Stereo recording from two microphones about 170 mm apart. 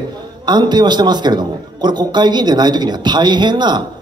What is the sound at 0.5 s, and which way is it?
A man's voice, 25° right (ahead or behind).